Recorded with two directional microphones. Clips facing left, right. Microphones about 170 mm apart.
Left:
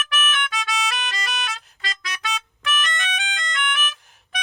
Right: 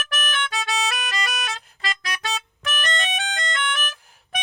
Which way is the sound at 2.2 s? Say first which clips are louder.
Left 2 dB; 40° right (ahead or behind).